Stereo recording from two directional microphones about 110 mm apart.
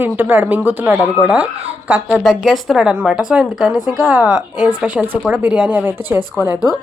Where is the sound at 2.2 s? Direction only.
5° left (ahead or behind).